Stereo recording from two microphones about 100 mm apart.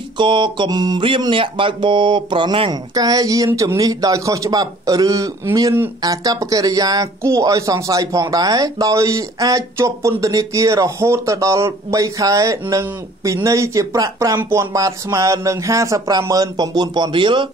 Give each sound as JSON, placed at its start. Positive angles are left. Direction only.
{"t": 0.2, "sound": "music", "side_deg": -55}
{"t": 1.0, "sound": "speech", "side_deg": -60}
{"t": 2.7, "sound": "speech", "side_deg": -40}